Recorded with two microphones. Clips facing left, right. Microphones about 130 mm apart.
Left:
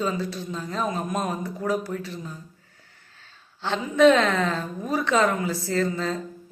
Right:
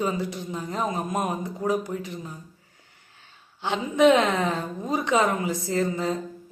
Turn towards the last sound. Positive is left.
turn(degrees=-15)  # may be behind; listen again after turning